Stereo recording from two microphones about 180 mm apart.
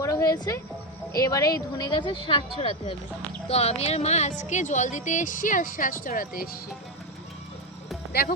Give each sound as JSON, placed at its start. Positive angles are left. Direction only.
{"t": 0.0, "sound": "a woman's voice", "side_deg": 15}
{"t": 8.1, "sound": "speech", "side_deg": 55}